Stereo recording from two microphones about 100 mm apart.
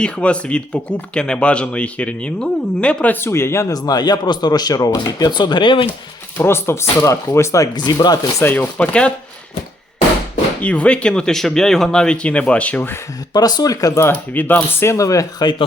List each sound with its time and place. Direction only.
0.0 s speech: 10° left (ahead or behind); by 5.9 s 55° left (ahead or behind)
6.3 s speech: 25° left (ahead or behind)
7.8 s speech: 45° left (ahead or behind)
8.4 s speech: 20° left (ahead or behind)
10.6 s speech: 15° left (ahead or behind)
13.3 s speech: 40° left (ahead or behind)
14.0 s speech: 20° left (ahead or behind); by 15.4 s 35° left (ahead or behind)